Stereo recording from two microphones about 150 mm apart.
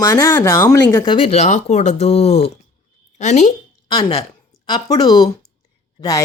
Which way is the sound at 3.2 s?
50° left (ahead or behind).